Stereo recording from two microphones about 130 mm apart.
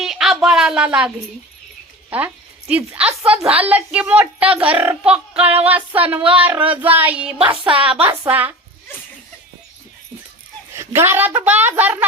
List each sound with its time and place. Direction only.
0.0 s a sound: centre (ahead or behind)
2.0 s a woman's voice: 10° right (ahead or behind)
7.3 s music: 45° right (ahead or behind)
7.6 s speech: 10° right (ahead or behind)
10.8 s speech: 20° right (ahead or behind)